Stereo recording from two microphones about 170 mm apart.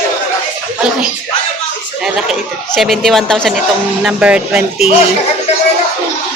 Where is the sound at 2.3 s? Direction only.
Centre (ahead or behind).